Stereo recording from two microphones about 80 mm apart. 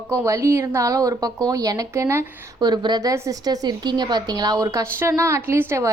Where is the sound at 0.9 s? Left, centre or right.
Right.